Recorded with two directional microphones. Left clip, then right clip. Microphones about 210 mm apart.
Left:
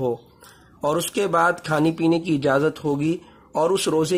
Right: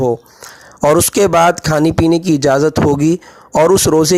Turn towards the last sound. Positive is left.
turn(degrees=-45)  # may be behind; listen again after turning